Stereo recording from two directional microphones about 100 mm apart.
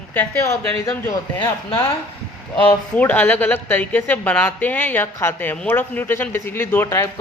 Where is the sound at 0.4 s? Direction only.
30° left (ahead or behind).